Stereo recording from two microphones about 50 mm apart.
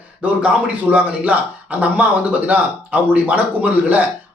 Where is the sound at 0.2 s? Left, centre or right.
Right.